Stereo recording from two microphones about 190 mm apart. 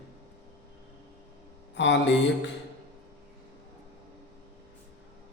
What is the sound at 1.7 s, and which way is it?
Mantra, 70° left (ahead or behind).